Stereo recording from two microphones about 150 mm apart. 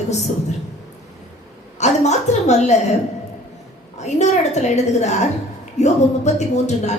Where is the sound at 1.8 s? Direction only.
50° left (ahead or behind).